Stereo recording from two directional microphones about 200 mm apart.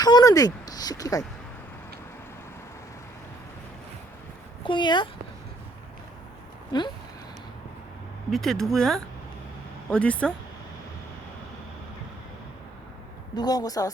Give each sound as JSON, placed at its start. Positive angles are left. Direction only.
{"t": 0.0, "sound": "a sound", "side_deg": 20}
{"t": 4.6, "sound": "a woman's voice", "side_deg": 25}
{"t": 6.7, "sound": "a woman's voice", "side_deg": 20}
{"t": 8.3, "sound": "speech", "side_deg": 0}
{"t": 13.3, "sound": "a woman's voice", "side_deg": 20}